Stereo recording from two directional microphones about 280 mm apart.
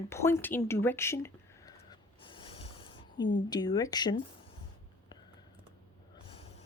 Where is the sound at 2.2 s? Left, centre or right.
Centre.